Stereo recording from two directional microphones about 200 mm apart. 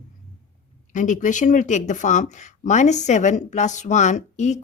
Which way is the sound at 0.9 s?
40° left (ahead or behind).